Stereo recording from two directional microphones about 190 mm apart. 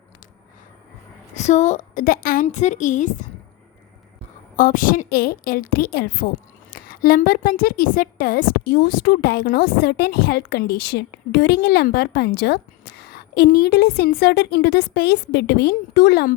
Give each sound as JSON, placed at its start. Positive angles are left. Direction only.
{"t": 1.4, "sound": "a woman's voice", "side_deg": 35}
{"t": 4.5, "sound": "a woman's voice", "side_deg": 45}